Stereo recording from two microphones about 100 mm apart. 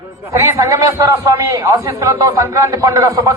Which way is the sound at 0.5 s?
25° right (ahead or behind).